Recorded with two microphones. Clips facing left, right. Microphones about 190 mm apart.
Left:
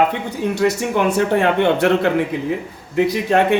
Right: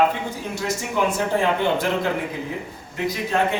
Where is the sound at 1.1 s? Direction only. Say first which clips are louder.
Left 5 dB; 65° left (ahead or behind).